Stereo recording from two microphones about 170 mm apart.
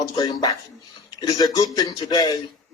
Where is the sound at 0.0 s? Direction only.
25° left (ahead or behind).